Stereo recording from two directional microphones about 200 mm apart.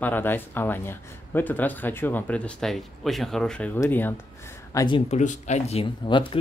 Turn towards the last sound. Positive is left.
turn(degrees=25)  # may be behind; listen again after turning